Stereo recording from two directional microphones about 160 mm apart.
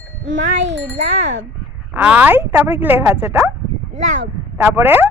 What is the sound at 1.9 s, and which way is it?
Speech, 10° right (ahead or behind).